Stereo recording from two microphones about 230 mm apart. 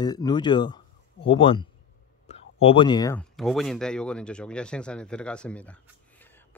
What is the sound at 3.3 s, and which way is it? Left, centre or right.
Speech, centre.